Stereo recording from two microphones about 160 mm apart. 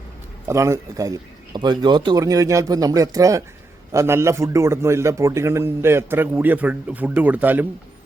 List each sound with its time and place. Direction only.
0.4 s a man's voice: 20° right (ahead or behind)